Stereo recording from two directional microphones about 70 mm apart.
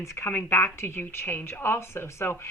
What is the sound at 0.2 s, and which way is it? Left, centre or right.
A woman's voice, left.